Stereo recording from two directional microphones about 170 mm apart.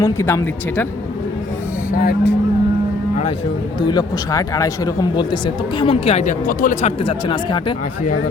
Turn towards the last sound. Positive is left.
turn(degrees=30)  # may be behind; listen again after turning